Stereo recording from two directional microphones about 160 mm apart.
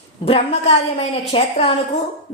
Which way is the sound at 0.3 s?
35° left (ahead or behind).